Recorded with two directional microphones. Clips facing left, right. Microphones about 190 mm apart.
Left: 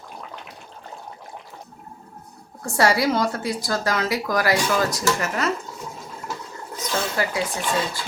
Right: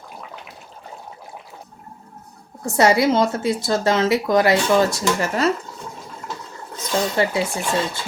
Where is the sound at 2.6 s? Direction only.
20° right (ahead or behind).